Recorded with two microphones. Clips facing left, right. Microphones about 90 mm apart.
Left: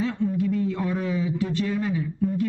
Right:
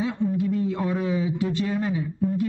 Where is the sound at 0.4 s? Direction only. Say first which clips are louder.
Even; 30° right (ahead or behind).